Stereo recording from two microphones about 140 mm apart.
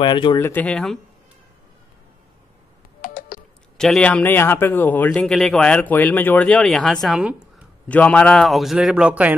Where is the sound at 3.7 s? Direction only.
5° left (ahead or behind).